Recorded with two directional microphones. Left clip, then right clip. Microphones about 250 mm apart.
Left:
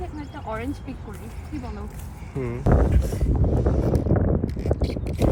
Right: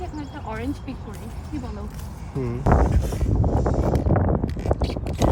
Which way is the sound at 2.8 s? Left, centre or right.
Centre.